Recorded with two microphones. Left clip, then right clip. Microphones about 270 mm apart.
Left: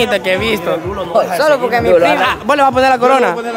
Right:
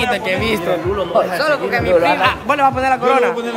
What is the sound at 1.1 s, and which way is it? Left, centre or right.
A man's voice, left.